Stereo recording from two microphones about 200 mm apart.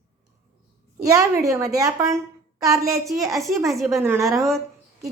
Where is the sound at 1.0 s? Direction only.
15° right (ahead or behind).